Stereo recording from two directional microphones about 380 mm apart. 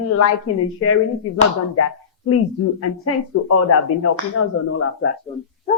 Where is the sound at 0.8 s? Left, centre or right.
Left.